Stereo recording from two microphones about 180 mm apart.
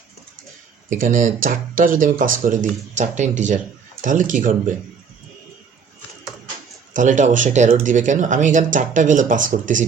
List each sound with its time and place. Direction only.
0.9 s speech: 50° right (ahead or behind)
6.9 s speech: 45° right (ahead or behind)